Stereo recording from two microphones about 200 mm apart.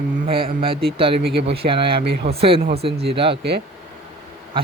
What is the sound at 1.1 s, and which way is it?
Speech, 55° right (ahead or behind).